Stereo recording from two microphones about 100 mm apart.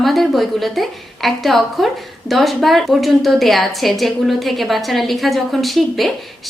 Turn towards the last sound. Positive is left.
turn(degrees=0)  # may be behind; listen again after turning